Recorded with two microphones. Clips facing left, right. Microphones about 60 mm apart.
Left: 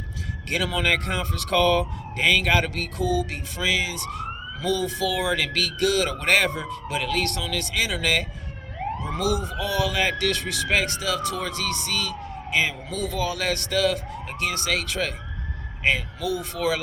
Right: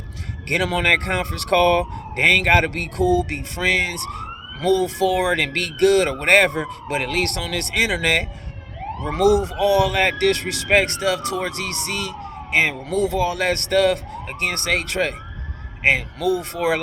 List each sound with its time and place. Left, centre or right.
0.5 s speech: right